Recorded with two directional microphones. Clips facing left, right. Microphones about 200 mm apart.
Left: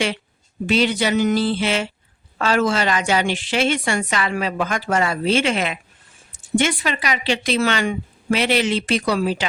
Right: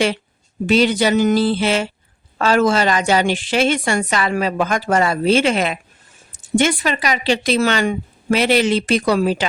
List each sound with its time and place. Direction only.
0.7 s a woman's voice: 40° right (ahead or behind)